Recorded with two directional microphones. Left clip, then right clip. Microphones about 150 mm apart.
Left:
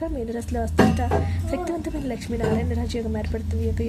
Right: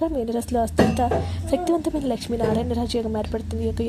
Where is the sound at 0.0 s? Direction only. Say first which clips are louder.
Right 5 dB; 30° right (ahead or behind).